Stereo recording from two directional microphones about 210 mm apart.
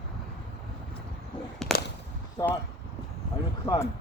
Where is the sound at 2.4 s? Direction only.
20° left (ahead or behind).